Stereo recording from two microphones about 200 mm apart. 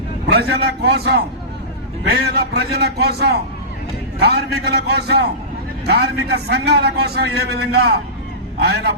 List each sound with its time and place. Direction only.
0.3 s a man's voice: 55° right (ahead or behind)